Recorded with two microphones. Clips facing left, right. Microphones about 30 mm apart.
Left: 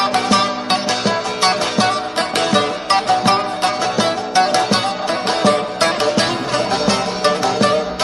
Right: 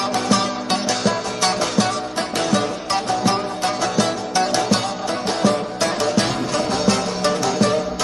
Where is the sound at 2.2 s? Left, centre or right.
Left.